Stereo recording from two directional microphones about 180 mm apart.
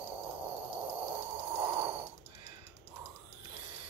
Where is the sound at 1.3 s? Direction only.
10° right (ahead or behind).